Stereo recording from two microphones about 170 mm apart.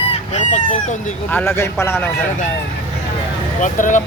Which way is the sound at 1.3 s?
10° left (ahead or behind).